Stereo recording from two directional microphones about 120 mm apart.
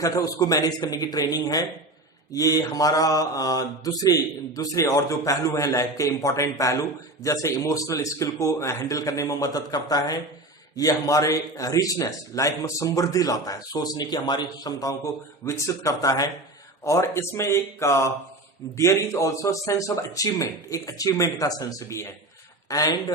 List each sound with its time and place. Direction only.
0.0 s a man's voice: 30° left (ahead or behind)
2.3 s mantra: 30° left (ahead or behind)
22.7 s a man's voice: 30° left (ahead or behind)